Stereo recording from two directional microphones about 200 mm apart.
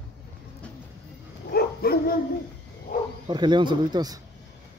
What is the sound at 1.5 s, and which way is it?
Dog, 50° left (ahead or behind).